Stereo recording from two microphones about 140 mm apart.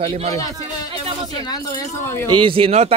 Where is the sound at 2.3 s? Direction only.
35° right (ahead or behind).